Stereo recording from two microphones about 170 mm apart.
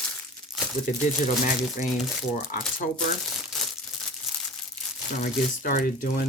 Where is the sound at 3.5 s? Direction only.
Centre (ahead or behind).